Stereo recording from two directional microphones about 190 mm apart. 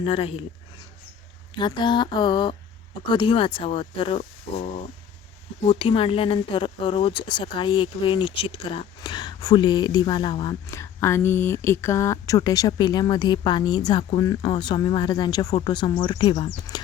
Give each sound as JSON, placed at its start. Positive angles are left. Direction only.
{"t": 0.0, "sound": "speech", "side_deg": 30}
{"t": 1.5, "sound": "speech", "side_deg": 25}